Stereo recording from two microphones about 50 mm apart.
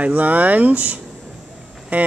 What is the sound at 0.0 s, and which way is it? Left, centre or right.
Speech, right.